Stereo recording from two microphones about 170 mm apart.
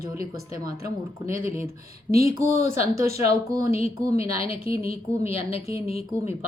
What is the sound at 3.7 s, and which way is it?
Speech, 35° left (ahead or behind).